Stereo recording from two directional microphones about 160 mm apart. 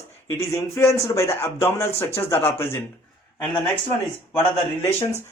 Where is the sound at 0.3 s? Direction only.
20° left (ahead or behind).